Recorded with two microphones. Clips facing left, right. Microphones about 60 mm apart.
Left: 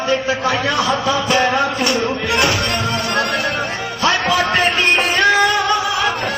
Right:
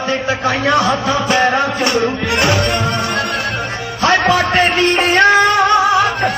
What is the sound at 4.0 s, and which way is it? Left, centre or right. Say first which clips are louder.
Music: right 4 dB; right.